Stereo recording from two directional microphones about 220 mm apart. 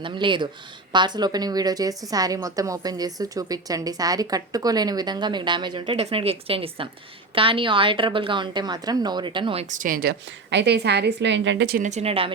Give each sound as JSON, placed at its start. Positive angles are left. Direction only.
{"t": 0.0, "sound": "a woman's voice", "side_deg": -20}
{"t": 11.9, "sound": "a woman's voice", "side_deg": -30}